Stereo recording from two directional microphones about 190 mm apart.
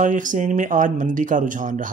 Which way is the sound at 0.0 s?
45° right (ahead or behind).